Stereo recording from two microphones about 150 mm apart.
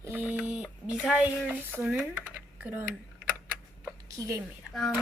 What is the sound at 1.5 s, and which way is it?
Speech, 10° right (ahead or behind).